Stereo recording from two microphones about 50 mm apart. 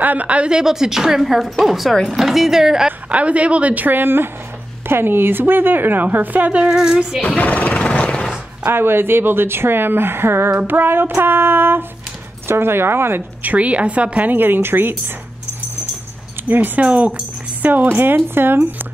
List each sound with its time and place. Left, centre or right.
0.0 s speech: right; by 2.9 s centre
3.1 s speech: right
6.6 s speech: centre
7.2 s a sound: left
8.6 s speech: right
13.4 s a woman's voice: right
16.4 s a woman's voice: right